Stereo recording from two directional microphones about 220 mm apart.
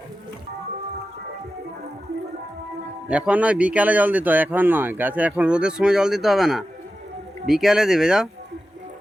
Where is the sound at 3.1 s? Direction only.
5° right (ahead or behind).